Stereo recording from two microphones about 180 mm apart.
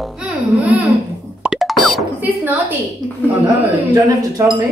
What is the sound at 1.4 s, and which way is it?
Plop, centre (ahead or behind).